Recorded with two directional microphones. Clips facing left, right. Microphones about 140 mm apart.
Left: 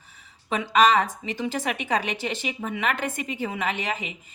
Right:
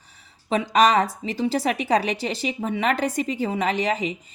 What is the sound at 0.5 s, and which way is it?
Speech, 40° right (ahead or behind).